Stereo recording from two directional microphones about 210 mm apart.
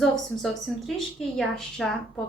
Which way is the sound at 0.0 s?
Centre (ahead or behind).